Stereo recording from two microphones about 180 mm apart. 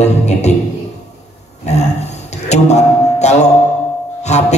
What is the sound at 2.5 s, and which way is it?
Music, 40° left (ahead or behind).